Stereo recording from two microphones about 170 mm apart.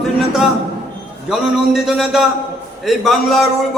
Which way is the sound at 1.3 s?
Centre (ahead or behind).